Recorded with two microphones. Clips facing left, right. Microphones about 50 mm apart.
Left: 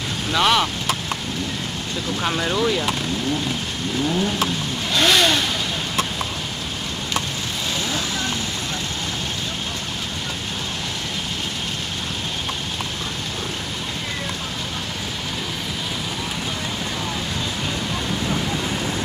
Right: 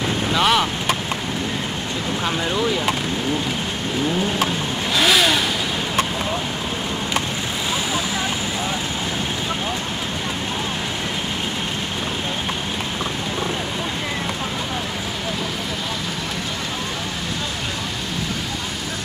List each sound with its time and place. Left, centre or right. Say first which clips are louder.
0.3 s speech: even; centre
2.2 s speech: left 1 dB; centre
4.9 s speech: even; centre